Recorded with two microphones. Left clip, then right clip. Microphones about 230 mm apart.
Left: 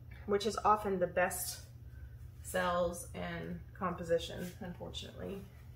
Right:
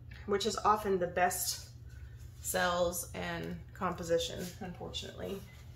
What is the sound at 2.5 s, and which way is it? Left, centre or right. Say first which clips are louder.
Speech: right 2 dB; right.